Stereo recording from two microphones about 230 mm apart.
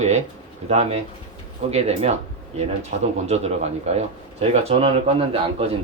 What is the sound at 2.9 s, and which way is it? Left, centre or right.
Speech, right.